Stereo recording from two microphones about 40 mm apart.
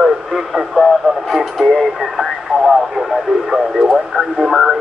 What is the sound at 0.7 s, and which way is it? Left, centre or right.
Speech, centre.